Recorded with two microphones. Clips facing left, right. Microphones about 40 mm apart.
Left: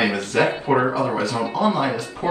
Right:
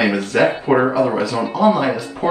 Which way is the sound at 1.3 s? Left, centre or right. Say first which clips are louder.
Right 5 dB; right.